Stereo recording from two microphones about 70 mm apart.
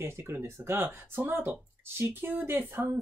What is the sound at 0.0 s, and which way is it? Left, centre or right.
Speech, right.